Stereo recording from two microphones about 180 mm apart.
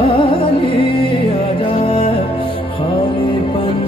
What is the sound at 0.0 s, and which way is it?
Music, 30° left (ahead or behind).